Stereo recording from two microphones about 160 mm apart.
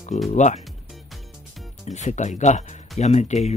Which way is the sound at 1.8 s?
45° left (ahead or behind).